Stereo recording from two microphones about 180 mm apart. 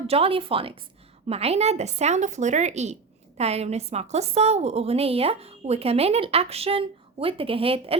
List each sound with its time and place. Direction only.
0.1 s speech: 30° right (ahead or behind)